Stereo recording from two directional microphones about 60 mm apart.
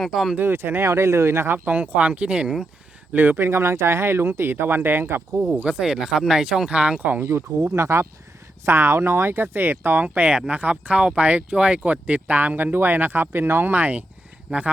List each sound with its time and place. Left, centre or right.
0.0 s speech: centre
0.3 s speech: right
3.1 s speech: right
5.5 s speech: centre
7.2 s speech: right
10.3 s speech: centre
14.5 s speech: centre